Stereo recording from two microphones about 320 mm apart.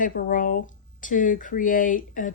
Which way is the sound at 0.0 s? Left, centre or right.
Left.